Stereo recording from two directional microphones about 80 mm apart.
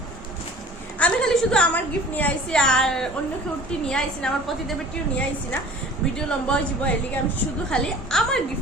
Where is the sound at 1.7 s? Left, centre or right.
Left.